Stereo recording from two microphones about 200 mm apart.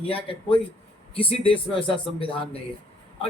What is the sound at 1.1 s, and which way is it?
Speech, 25° left (ahead or behind).